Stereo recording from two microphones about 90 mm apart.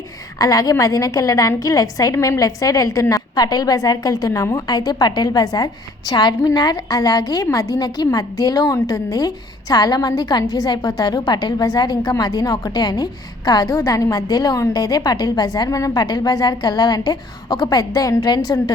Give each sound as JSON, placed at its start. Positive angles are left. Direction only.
{"t": 0.3, "sound": "a woman's voice", "side_deg": 45}
{"t": 4.3, "sound": "a woman's voice", "side_deg": 35}